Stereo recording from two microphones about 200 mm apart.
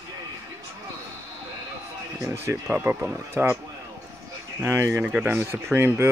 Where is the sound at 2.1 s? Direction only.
15° right (ahead or behind).